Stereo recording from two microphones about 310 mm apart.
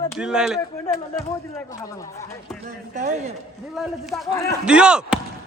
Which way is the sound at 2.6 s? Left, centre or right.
Right.